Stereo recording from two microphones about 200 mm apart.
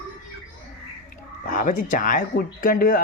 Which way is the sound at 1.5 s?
40° left (ahead or behind).